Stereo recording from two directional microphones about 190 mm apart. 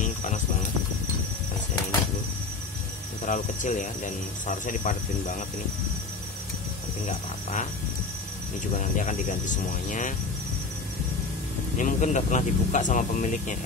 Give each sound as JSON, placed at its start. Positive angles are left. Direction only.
{"t": 0.0, "sound": "cricket", "side_deg": 40}
{"t": 3.3, "sound": "speech", "side_deg": 40}
{"t": 8.7, "sound": "speech", "side_deg": 40}
{"t": 11.7, "sound": "speech", "side_deg": 40}